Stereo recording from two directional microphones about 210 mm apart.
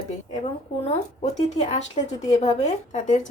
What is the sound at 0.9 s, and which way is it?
A woman's voice, 30° left (ahead or behind).